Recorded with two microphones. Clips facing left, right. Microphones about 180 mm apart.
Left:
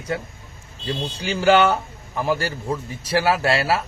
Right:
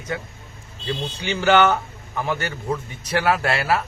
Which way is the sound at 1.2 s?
35° left (ahead or behind).